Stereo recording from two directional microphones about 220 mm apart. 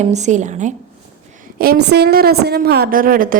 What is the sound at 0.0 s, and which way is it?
Speech, 30° right (ahead or behind).